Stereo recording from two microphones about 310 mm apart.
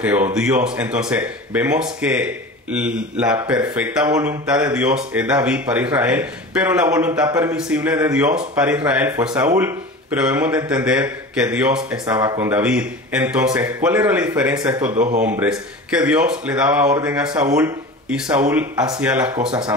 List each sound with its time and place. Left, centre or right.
0.0 s speech: centre
14.9 s speech: right
15.2 s speech: centre